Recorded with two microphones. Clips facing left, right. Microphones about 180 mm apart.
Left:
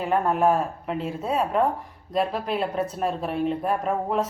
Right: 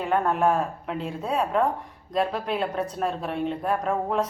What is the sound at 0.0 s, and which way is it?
Speech, centre (ahead or behind).